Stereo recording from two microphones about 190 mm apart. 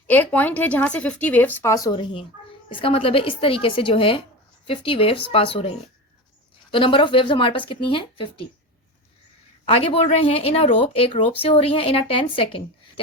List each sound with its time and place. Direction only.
0.1 s speech: 10° left (ahead or behind); by 5.7 s 30° left (ahead or behind)
6.7 s speech: 25° left (ahead or behind)
9.6 s speech: 30° left (ahead or behind)